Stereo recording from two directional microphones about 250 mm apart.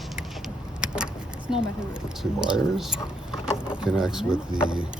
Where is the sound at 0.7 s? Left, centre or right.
Centre.